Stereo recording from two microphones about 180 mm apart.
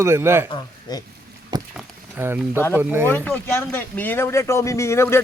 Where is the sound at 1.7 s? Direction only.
10° right (ahead or behind).